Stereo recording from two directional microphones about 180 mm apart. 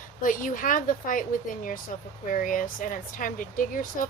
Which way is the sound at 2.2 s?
50° left (ahead or behind).